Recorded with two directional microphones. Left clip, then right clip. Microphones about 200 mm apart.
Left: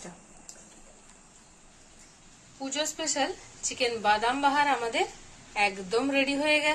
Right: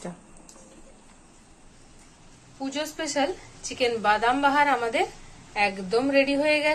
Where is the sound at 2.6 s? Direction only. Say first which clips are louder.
Right 1 dB; centre (ahead or behind).